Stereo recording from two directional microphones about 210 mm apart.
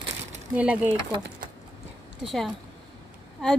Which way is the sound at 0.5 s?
5° right (ahead or behind).